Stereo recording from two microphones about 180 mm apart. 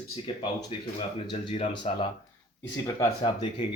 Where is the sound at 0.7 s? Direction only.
30° left (ahead or behind).